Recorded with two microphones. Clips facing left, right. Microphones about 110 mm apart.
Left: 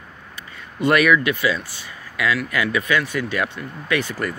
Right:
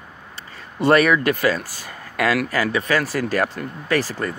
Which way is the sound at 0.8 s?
30° right (ahead or behind).